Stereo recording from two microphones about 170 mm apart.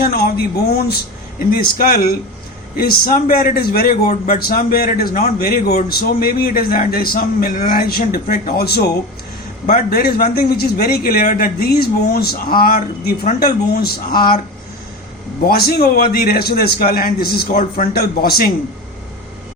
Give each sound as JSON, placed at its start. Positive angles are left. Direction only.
{"t": 0.0, "sound": "a man's voice", "side_deg": 65}
{"t": 1.5, "sound": "a man's voice", "side_deg": 60}
{"t": 9.6, "sound": "a man's voice", "side_deg": 50}
{"t": 10.0, "sound": "a man's voice", "side_deg": 60}
{"t": 15.4, "sound": "a man's voice", "side_deg": 65}